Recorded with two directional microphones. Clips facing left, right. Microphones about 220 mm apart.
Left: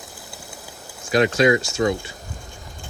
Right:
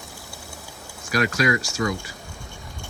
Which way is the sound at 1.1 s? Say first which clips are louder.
Left 6 dB; 25° left (ahead or behind).